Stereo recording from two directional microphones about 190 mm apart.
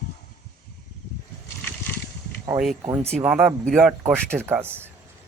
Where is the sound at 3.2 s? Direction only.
5° right (ahead or behind).